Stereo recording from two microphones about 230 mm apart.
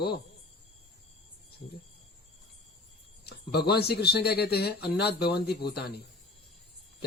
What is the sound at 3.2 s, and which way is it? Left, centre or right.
A man's voice, left.